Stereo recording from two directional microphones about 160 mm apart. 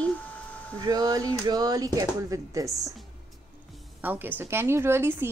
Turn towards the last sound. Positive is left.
turn(degrees=-15)  # may be behind; listen again after turning